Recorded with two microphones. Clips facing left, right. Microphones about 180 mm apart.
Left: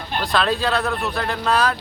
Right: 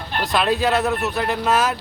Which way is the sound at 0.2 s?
15° right (ahead or behind).